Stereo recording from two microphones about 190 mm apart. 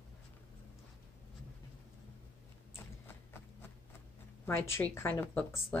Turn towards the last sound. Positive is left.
turn(degrees=10)  # may be behind; listen again after turning